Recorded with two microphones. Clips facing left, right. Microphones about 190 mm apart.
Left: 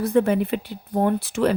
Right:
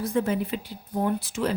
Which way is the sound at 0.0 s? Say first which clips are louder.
Left 6 dB; 60° left (ahead or behind).